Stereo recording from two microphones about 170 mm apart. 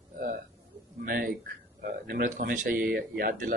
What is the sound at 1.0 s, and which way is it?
Speech, 55° right (ahead or behind).